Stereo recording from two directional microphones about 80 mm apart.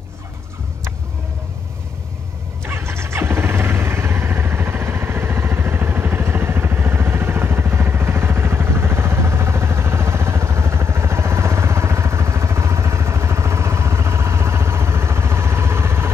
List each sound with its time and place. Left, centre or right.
2.6 s vehicle: right